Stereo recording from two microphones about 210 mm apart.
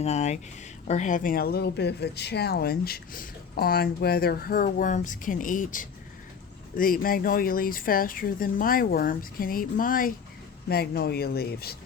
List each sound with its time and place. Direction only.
0.0 s speech: 30° left (ahead or behind); by 11.8 s 50° left (ahead or behind)